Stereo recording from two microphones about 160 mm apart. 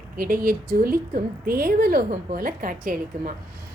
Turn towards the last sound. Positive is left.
turn(degrees=-60)  # may be behind; listen again after turning